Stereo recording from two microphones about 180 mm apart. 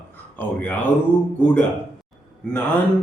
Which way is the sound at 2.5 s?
5° left (ahead or behind).